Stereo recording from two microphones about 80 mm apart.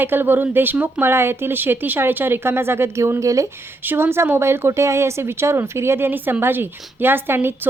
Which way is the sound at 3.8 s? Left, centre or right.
Right.